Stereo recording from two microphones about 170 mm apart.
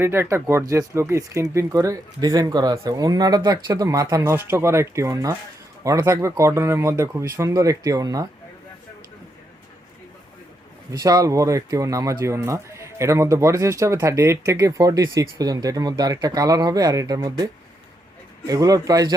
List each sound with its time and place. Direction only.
0.0 s speech: 15° right (ahead or behind)
10.9 s speech: 20° right (ahead or behind)